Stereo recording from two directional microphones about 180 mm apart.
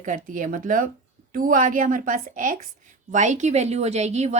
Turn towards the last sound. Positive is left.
turn(degrees=-40)  # may be behind; listen again after turning